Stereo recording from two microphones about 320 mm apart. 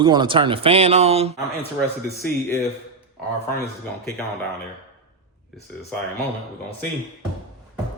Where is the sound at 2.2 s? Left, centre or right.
Centre.